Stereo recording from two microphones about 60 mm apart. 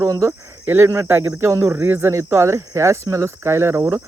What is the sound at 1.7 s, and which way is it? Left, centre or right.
Speech, right.